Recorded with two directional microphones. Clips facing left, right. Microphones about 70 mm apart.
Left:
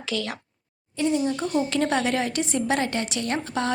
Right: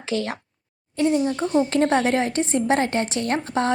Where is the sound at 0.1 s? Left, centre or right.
Right.